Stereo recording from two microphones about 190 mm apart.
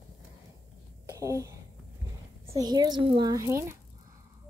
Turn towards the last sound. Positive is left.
turn(degrees=-15)  # may be behind; listen again after turning